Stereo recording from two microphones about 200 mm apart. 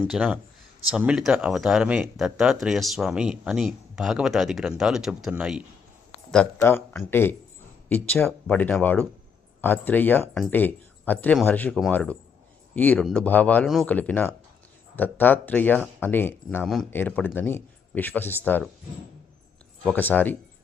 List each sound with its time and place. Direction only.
0.0 s speech: 5° right (ahead or behind)
6.3 s speech: 10° left (ahead or behind)
19.8 s speech: 5° left (ahead or behind)